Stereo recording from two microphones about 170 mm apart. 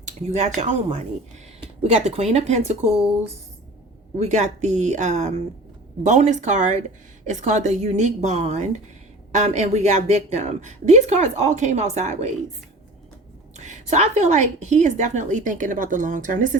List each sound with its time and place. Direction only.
0.0 s speech: 45° right (ahead or behind)
1.8 s speech: 40° right (ahead or behind)
4.2 s a woman's voice: 45° right (ahead or behind)
13.6 s a woman's voice: 40° right (ahead or behind)